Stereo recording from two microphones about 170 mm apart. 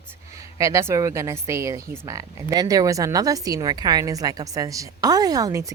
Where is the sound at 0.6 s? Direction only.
15° right (ahead or behind).